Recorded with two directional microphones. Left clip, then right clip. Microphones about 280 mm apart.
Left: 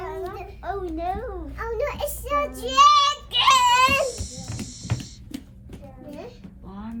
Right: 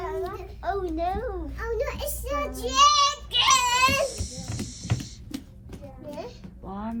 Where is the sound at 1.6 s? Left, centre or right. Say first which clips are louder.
Left 4 dB; centre.